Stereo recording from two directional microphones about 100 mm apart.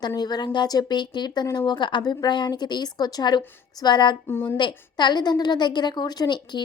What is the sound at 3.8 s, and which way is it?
Speech, 45° left (ahead or behind).